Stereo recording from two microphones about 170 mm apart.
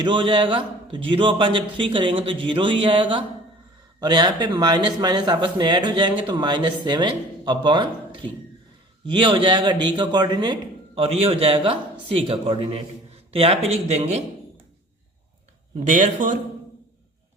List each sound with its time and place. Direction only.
0.0 s a man's voice: 30° right (ahead or behind)
15.9 s speech: 50° right (ahead or behind)